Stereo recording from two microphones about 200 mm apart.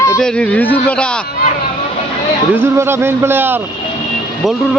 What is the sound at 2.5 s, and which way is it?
Speech, 10° right (ahead or behind).